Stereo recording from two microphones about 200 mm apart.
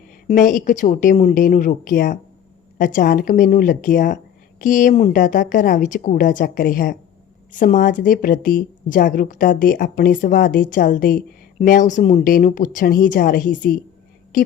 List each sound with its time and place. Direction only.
0.3 s a woman's voice: 40° left (ahead or behind)